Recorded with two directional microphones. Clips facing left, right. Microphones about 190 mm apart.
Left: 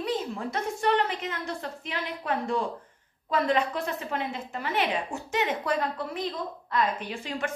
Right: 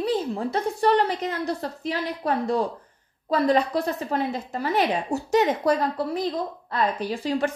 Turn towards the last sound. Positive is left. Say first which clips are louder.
# right 8 dB
turn(degrees=-35)  # may be behind; listen again after turning